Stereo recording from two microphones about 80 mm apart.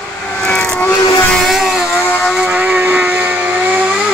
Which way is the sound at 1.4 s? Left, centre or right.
Centre.